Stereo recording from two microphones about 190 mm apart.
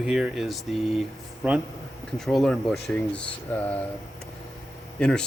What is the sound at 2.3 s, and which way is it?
Speech, centre (ahead or behind).